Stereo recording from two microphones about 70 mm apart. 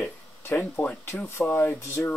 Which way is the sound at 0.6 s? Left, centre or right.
Left.